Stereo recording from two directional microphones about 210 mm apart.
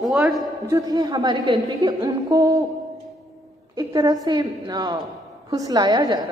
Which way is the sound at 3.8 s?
20° right (ahead or behind).